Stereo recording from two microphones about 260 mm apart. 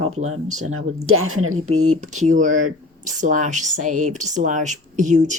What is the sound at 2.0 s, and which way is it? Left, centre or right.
Speech, right.